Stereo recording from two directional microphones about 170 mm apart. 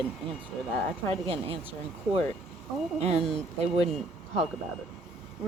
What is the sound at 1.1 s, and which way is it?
Speech, 30° right (ahead or behind).